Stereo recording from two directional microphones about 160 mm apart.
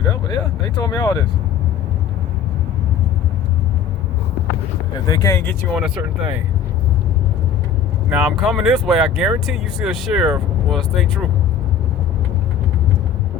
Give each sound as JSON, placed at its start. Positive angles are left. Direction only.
{"t": 0.1, "sound": "speech", "side_deg": 25}
{"t": 5.0, "sound": "speech", "side_deg": 20}
{"t": 5.7, "sound": "speech", "side_deg": -5}
{"t": 8.1, "sound": "speech", "side_deg": -5}